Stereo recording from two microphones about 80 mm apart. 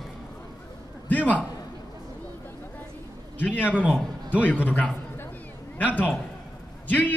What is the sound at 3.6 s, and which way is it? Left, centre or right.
Speech, centre.